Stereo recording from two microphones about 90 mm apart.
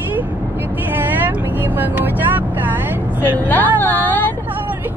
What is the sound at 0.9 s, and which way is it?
Speech, 20° right (ahead or behind).